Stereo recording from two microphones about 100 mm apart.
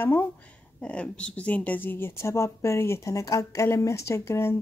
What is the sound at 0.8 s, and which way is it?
Speech, 10° left (ahead or behind).